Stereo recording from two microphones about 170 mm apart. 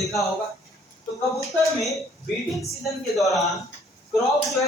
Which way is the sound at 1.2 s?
Centre (ahead or behind).